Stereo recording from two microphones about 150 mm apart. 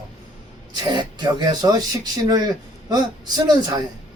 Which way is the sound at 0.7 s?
30° right (ahead or behind).